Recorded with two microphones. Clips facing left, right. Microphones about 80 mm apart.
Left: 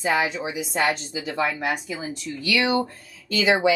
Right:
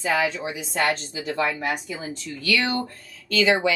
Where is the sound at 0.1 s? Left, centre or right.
Centre.